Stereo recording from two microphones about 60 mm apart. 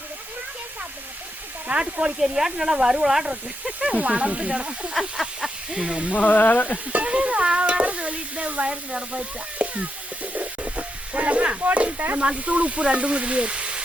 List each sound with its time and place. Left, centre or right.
1.6 s speech: centre
2.1 s speech: centre
4.9 s speech: centre
6.1 s speech: left
6.9 s stir: right
9.6 s frying: right
10.3 s snake: right
11.9 s speech: right
12.2 s frying: centre